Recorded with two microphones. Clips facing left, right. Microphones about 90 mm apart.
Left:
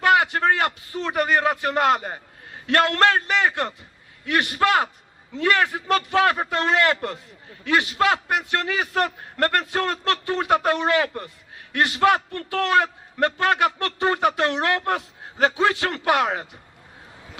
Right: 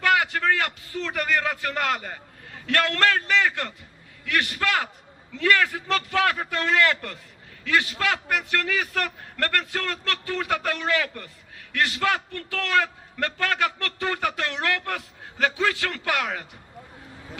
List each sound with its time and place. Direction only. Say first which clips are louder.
0.0 s a man's voice: left 4 dB; 25° left (ahead or behind)